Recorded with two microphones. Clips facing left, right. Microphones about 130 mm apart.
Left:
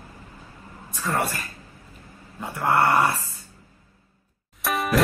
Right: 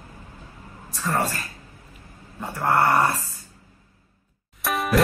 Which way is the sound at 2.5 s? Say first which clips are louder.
Even; 20° right (ahead or behind).